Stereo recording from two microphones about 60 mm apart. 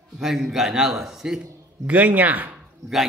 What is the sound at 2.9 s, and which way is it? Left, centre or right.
Speech, centre.